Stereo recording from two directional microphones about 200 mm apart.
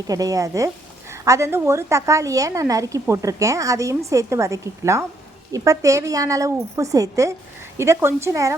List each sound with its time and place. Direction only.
0.1 s a woman's voice: 20° right (ahead or behind)